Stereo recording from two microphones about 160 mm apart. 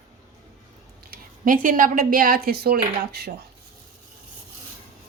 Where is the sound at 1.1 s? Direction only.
60° right (ahead or behind); by 3.3 s 85° right.